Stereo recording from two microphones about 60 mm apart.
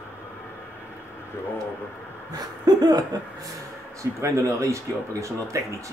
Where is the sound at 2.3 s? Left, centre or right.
Right.